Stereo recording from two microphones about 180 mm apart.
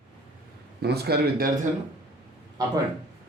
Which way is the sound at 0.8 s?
65° right (ahead or behind).